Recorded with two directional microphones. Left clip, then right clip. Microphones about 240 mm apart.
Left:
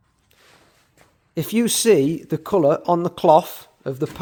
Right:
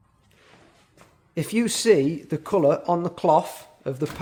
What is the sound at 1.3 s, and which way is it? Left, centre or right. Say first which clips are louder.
Speech: left 4 dB; left.